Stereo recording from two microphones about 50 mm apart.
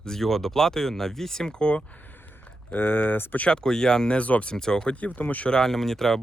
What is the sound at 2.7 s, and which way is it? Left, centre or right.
Speech, left.